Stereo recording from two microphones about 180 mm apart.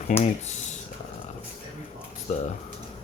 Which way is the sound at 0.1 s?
45° left (ahead or behind).